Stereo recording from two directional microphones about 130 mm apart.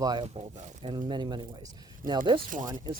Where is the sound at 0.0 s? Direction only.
30° right (ahead or behind).